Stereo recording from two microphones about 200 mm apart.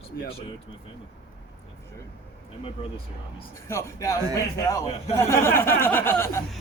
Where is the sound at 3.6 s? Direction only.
15° left (ahead or behind).